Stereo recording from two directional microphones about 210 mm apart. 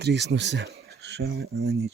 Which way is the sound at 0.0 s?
50° right (ahead or behind).